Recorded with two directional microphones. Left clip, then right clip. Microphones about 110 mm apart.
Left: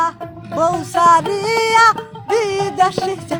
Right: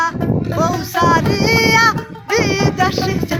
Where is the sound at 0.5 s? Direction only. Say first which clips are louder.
Left 3 dB; 60° left (ahead or behind).